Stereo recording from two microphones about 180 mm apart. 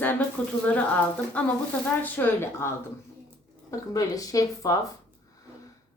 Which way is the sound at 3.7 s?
20° left (ahead or behind).